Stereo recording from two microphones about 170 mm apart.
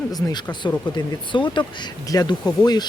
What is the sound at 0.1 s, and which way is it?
Speech, 20° left (ahead or behind).